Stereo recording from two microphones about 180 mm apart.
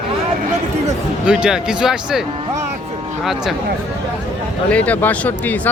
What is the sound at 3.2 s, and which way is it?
Speech, centre (ahead or behind).